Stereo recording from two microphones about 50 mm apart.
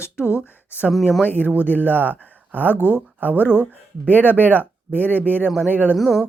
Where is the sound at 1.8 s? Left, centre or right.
Right.